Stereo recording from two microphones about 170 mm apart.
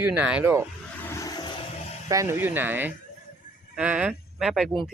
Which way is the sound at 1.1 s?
20° left (ahead or behind).